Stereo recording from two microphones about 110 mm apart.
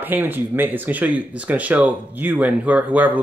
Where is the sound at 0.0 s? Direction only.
15° right (ahead or behind).